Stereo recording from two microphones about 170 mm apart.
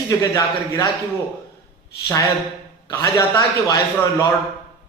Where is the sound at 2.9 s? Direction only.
20° left (ahead or behind).